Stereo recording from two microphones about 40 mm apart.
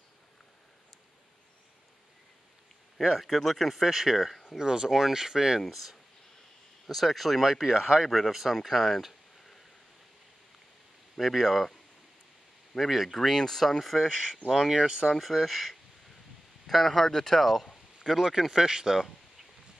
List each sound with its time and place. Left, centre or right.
3.2 s speech: centre
3.8 s speech: centre
5.6 s speech: centre
7.4 s speech: centre
8.5 s a sound: centre
11.1 s speech: centre
12.7 s speech: centre
14.0 s speech: centre
14.7 s speech: right
15.0 s speech: centre
18.1 s speech: centre